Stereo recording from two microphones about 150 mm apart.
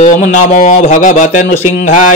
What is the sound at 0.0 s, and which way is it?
Speech, 55° left (ahead or behind).